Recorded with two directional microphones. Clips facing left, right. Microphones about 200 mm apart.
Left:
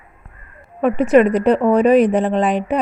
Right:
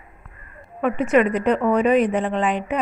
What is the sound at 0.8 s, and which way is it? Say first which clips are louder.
Speech: left 5 dB; 35° left (ahead or behind).